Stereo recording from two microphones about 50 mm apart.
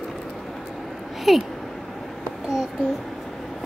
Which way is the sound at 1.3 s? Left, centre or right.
Centre.